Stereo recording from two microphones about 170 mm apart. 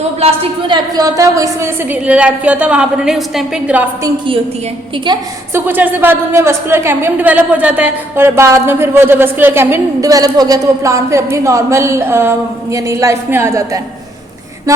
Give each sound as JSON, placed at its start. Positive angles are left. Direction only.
{"t": 0.2, "sound": "a woman's voice", "side_deg": -35}
{"t": 0.9, "sound": "a woman's voice", "side_deg": -20}
{"t": 5.5, "sound": "a woman's voice", "side_deg": -10}